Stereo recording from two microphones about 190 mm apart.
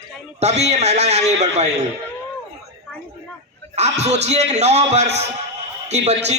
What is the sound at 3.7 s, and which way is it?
A man's voice, 35° right (ahead or behind).